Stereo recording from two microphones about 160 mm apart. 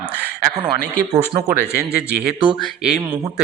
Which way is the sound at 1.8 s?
5° right (ahead or behind).